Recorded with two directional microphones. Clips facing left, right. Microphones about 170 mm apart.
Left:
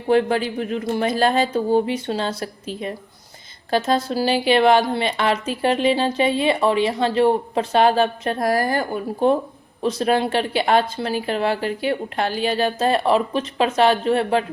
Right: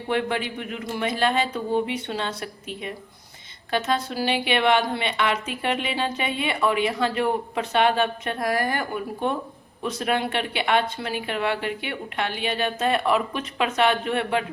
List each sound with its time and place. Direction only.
0.1 s a woman's voice: 35° left (ahead or behind)